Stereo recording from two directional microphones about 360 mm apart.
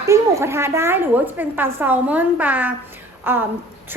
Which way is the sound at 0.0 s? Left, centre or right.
Centre.